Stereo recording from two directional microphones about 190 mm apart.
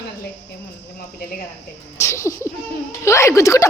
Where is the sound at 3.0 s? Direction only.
15° left (ahead or behind).